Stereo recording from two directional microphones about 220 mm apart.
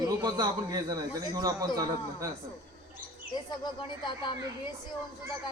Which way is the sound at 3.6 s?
20° left (ahead or behind).